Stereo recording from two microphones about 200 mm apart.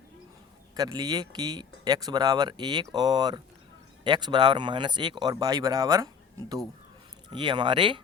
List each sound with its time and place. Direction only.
0.8 s speech: 20° right (ahead or behind)
7.3 s speech: 25° right (ahead or behind)